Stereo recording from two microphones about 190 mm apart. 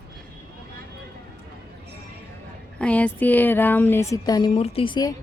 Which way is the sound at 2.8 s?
5° left (ahead or behind).